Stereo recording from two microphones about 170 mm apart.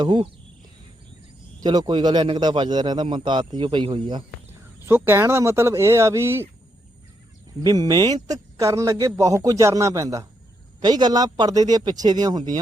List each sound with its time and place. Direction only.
0.0 s a man's voice: 30° right (ahead or behind)
1.6 s a man's voice: 25° right (ahead or behind)
4.9 s speech: 15° right (ahead or behind)
7.6 s a man's voice: 20° right (ahead or behind)